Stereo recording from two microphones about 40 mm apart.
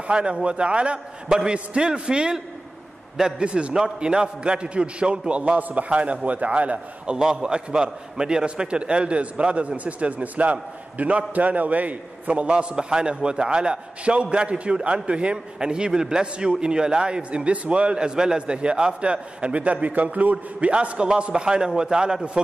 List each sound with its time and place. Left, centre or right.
0.0 s a man's voice: right
5.6 s a man's voice: right
7.2 s a man's voice: centre
21.3 s a man's voice: centre